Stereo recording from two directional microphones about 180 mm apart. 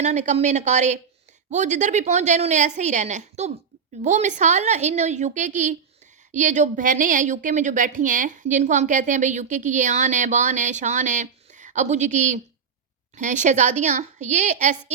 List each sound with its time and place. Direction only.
0.0 s a woman's voice: 40° right (ahead or behind)